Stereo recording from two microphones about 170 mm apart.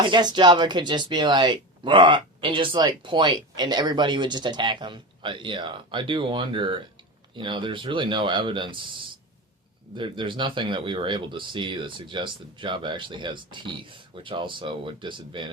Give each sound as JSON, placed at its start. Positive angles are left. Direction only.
{"t": 0.0, "sound": "speech", "side_deg": -25}